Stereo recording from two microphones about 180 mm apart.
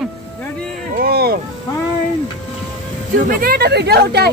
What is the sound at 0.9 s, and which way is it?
Music, 60° right (ahead or behind).